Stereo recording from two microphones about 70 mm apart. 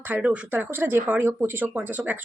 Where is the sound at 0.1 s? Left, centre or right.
Right.